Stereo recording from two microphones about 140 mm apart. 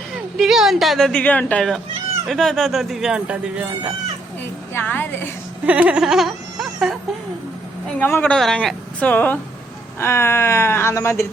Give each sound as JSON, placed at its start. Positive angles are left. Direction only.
{"t": 0.3, "sound": "speech", "side_deg": 0}
{"t": 4.7, "sound": "a woman's voice", "side_deg": 15}
{"t": 5.6, "sound": "a sound", "side_deg": -10}
{"t": 7.9, "sound": "a woman's voice", "side_deg": 15}